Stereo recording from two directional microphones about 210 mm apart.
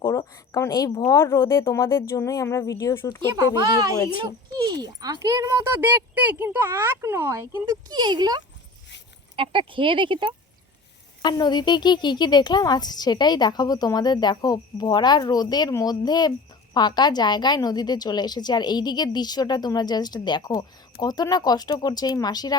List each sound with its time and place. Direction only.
0.0 s speech: 15° left (ahead or behind)
4.6 s speech: 20° right (ahead or behind)
11.2 s speech: 20° left (ahead or behind)